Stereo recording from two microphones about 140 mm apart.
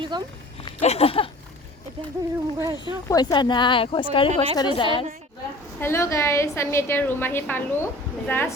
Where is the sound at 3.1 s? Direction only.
25° left (ahead or behind).